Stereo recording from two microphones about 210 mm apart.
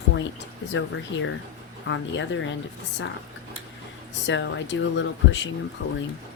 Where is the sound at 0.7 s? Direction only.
60° left (ahead or behind).